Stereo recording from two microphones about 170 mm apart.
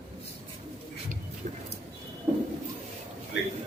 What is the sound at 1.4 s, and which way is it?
Music, 45° right (ahead or behind).